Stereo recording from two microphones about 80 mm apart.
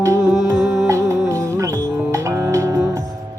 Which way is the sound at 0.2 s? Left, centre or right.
Centre.